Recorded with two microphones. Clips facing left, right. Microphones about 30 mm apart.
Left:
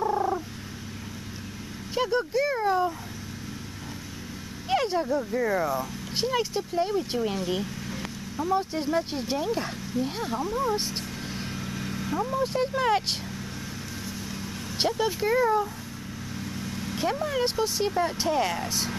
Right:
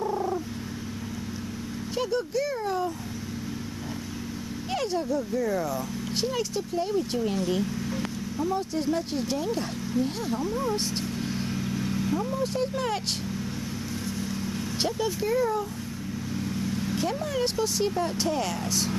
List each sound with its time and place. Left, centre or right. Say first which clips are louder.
0.0 s frog: left 2 dB; left
2.0 s speech: left 3 dB; left
4.6 s speech: left 3 dB; centre
5.8 s speech: even; centre
8.5 s speech: left 2 dB; centre
14.8 s speech: left 3 dB; centre
16.3 s vehicle: right 4 dB; centre
17.0 s speech: left 3 dB; centre